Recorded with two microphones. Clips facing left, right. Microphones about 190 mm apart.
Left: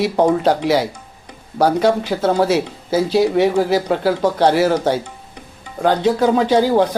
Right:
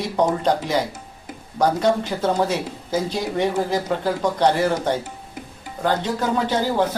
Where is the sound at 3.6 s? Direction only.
10° left (ahead or behind).